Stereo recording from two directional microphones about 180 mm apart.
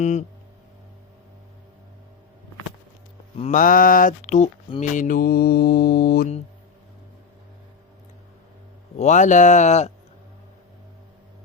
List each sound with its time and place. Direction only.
0.0 s speech: 40° left (ahead or behind)
3.5 s speech: 50° left (ahead or behind)
4.8 s mantra: 45° left (ahead or behind)
9.0 s speech: 40° left (ahead or behind)